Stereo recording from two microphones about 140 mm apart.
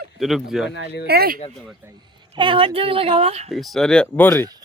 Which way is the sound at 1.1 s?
90° right.